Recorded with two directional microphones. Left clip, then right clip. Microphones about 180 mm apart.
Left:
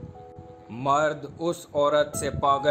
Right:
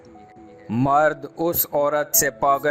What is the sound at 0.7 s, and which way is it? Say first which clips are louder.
Speech: right 5 dB; 45° right (ahead or behind).